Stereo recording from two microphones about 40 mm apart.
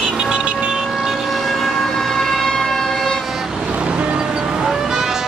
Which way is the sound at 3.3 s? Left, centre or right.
Centre.